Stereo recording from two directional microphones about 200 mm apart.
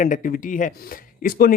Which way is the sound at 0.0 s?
40° left (ahead or behind).